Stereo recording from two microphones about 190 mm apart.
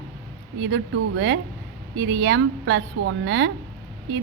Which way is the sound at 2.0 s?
70° right (ahead or behind).